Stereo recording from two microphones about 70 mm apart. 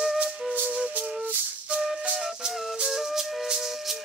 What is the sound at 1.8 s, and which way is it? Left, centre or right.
Music, centre.